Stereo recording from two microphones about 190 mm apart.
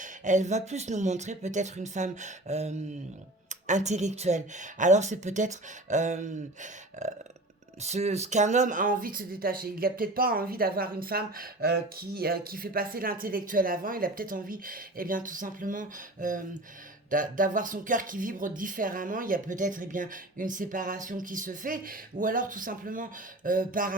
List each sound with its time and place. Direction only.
0.0 s a woman's voice: 40° right (ahead or behind)